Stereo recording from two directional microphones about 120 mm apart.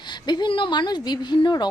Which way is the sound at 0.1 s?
40° left (ahead or behind).